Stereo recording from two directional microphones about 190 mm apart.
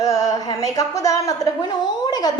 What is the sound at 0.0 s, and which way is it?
Speech, 20° left (ahead or behind).